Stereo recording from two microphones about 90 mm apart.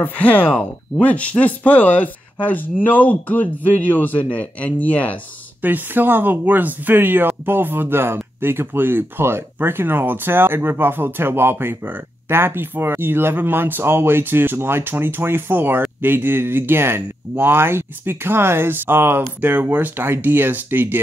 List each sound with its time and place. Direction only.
0.0 s speech: 20° left (ahead or behind)
5.6 s speech: 20° right (ahead or behind)